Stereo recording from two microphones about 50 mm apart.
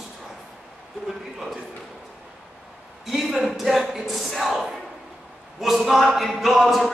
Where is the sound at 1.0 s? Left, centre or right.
Centre.